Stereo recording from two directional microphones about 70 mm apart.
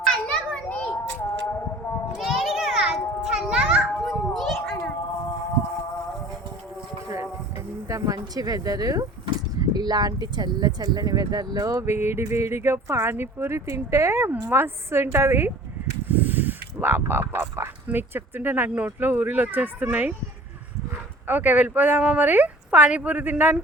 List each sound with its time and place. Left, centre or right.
0.0 s children playing: centre
2.1 s children playing: centre
4.0 s a sound: centre
7.9 s speech: right
9.6 s speech: right
10.9 s speech: right
11.9 s speech: right
16.0 s a sound: right
18.9 s speech: right
21.2 s speech: right